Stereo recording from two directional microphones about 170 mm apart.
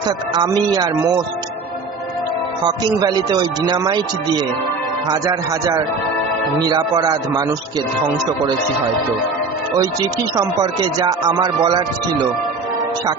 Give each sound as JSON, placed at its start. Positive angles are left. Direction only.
{"t": 0.3, "sound": "speech", "side_deg": -25}
{"t": 2.8, "sound": "speech", "side_deg": -25}
{"t": 5.0, "sound": "speech", "side_deg": -20}
{"t": 10.3, "sound": "speech", "side_deg": -25}